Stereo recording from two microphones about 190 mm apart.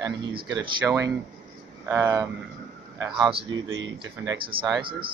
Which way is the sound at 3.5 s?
85° right.